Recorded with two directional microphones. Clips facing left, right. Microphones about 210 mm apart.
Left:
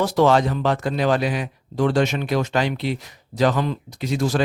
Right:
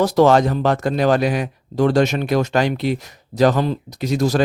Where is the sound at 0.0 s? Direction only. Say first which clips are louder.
Right 4 dB; 40° right (ahead or behind).